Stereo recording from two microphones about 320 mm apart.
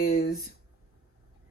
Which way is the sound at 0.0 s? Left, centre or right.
Left.